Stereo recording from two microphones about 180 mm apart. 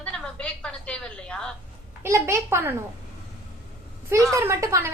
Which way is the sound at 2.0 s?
15° right (ahead or behind).